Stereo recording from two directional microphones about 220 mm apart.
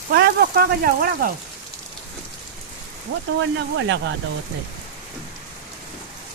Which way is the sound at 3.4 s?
55° right (ahead or behind).